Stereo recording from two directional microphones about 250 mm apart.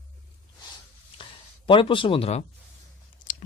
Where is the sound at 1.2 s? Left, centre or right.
Centre.